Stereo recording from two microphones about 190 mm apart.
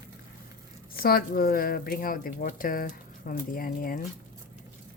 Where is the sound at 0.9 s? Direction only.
50° left (ahead or behind).